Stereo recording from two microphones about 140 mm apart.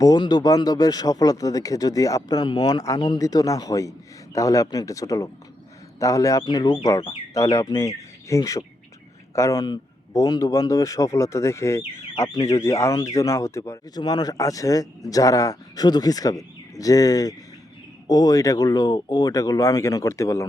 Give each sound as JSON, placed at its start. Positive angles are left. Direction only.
{"t": 0.0, "sound": "speech", "side_deg": 30}